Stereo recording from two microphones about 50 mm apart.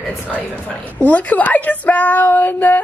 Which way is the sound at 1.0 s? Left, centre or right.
Left.